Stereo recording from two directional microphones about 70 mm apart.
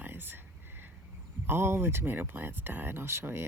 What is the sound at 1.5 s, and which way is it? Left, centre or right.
Speech, right.